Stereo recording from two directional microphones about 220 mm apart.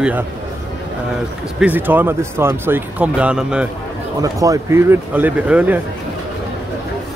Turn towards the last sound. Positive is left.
turn(degrees=-5)  # may be behind; listen again after turning